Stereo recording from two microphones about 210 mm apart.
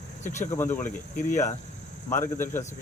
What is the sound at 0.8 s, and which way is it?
Speech, 35° left (ahead or behind).